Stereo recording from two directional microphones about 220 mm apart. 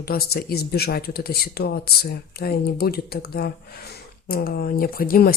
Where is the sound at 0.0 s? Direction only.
45° left (ahead or behind).